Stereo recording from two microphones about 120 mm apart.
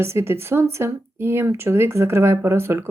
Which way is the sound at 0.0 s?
20° right (ahead or behind).